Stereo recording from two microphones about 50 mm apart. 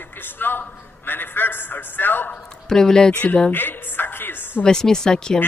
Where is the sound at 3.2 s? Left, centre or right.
Left.